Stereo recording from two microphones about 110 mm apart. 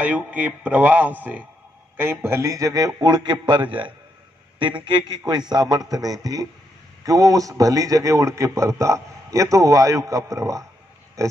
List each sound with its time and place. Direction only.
0.0 s a man's voice: 15° right (ahead or behind); by 11.3 s 30° right (ahead or behind)